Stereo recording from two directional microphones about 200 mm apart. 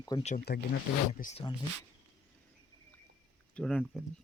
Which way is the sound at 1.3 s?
25° left (ahead or behind).